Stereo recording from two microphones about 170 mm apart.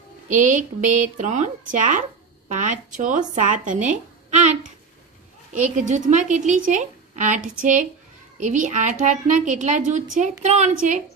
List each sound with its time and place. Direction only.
0.3 s a woman's voice: 50° right (ahead or behind)